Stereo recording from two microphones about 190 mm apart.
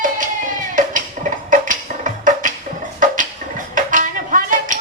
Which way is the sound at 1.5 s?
45° right (ahead or behind).